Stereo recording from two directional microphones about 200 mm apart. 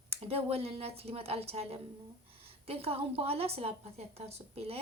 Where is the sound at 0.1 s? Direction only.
30° right (ahead or behind).